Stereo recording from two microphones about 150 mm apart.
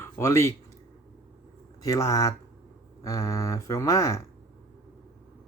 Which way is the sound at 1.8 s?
20° left (ahead or behind).